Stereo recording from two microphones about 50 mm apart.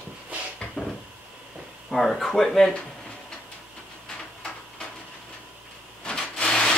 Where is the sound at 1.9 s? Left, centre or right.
Centre.